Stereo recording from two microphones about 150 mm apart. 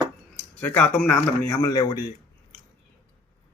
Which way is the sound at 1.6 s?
25° left (ahead or behind).